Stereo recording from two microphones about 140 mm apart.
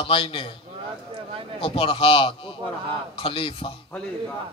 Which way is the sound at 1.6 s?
45° left (ahead or behind).